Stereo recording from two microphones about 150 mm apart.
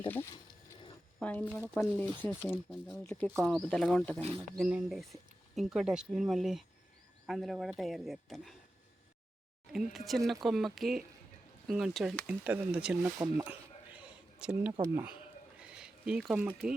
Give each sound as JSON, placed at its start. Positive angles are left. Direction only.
{"t": 0.1, "sound": "speech", "side_deg": 15}
{"t": 2.6, "sound": "speech", "side_deg": 0}
{"t": 4.2, "sound": "speech", "side_deg": -40}
{"t": 4.4, "sound": "speech", "side_deg": -5}
{"t": 9.7, "sound": "speech", "side_deg": 0}
{"t": 13.3, "sound": "a sound", "side_deg": -10}